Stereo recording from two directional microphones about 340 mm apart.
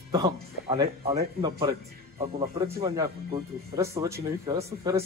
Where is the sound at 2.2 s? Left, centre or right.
Centre.